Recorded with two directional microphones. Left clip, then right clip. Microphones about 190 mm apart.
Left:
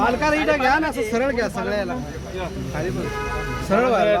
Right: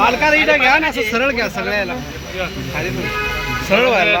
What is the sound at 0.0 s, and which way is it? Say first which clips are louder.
Speech: right 6 dB; 5° left (ahead or behind).